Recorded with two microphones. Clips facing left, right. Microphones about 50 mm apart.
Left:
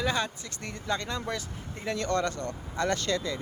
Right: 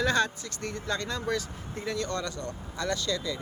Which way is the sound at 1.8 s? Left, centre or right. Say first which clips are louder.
Left 4 dB; left.